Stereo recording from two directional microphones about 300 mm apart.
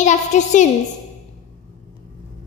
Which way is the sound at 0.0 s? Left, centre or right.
Left.